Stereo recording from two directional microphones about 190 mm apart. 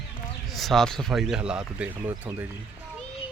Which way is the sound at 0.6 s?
Centre (ahead or behind).